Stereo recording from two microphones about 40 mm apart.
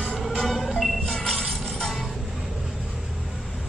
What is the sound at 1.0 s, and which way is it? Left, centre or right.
Music, centre.